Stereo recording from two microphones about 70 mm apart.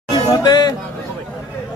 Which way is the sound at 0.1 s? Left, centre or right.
Left.